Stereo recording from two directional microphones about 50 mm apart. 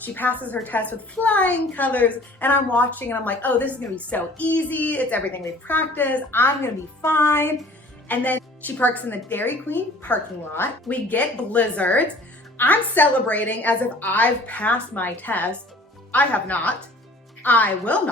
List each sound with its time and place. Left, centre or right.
0.0 s a woman's voice: left
7.0 s music: left
8.0 s a woman's voice: left